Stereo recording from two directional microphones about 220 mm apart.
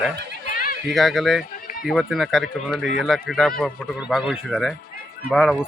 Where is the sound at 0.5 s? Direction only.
40° left (ahead or behind).